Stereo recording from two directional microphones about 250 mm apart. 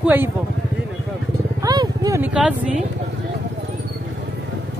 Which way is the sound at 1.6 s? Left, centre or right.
Centre.